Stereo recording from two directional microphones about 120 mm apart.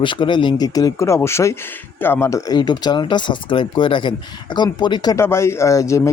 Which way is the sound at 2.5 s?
35° left (ahead or behind).